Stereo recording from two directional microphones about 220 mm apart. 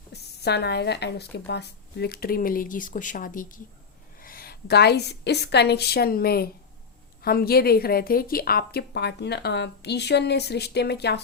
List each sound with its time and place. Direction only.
0.1 s a woman's voice: 50° left (ahead or behind)